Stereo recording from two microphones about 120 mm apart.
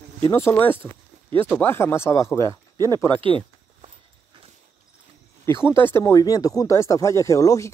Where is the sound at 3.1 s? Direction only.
45° right (ahead or behind).